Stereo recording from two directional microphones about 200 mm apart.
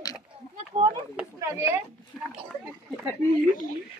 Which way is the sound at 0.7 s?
30° right (ahead or behind).